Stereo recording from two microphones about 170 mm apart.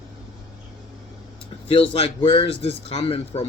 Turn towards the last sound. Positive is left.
turn(degrees=35)  # may be behind; listen again after turning